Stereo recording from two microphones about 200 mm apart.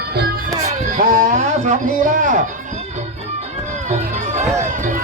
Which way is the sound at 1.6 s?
40° right (ahead or behind).